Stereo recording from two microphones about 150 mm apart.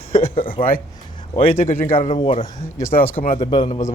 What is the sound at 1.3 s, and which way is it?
Speech, 40° left (ahead or behind).